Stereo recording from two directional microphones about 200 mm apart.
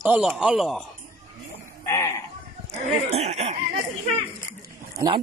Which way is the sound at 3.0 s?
30° right (ahead or behind).